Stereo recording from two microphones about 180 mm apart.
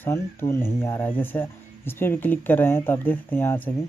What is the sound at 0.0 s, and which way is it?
Speech, 15° left (ahead or behind).